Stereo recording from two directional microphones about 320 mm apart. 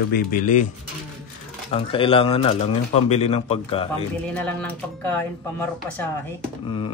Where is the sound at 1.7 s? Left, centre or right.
Centre.